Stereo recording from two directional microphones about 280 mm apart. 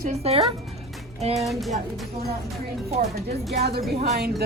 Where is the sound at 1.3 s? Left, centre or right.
Centre.